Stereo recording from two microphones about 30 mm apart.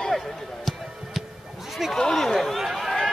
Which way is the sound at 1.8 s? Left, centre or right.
Centre.